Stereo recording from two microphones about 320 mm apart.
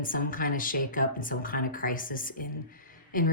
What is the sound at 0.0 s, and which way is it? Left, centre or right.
Speech, left.